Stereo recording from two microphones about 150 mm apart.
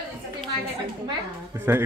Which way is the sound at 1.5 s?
15° right (ahead or behind).